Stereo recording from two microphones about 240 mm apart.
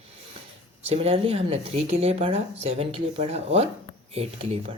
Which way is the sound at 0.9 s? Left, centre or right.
Right.